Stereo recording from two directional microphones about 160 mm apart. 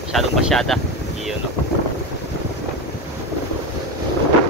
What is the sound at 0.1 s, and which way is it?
Speech, centre (ahead or behind).